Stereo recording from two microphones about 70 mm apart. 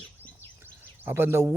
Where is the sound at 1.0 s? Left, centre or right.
Right.